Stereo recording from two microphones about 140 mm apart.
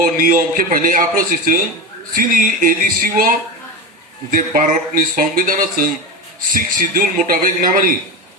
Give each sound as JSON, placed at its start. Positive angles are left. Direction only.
{"t": 0.0, "sound": "a man's voice", "side_deg": -85}
{"t": 2.1, "sound": "a man's voice", "side_deg": -75}